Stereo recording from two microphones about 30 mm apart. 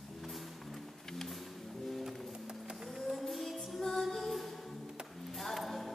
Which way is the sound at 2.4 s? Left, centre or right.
Centre.